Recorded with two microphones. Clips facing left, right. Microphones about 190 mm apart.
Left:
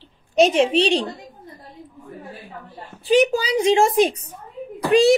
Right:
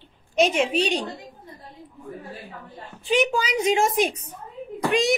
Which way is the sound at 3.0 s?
35° left (ahead or behind).